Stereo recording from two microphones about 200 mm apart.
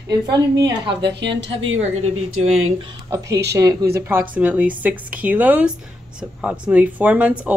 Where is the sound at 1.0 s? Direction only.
60° right (ahead or behind).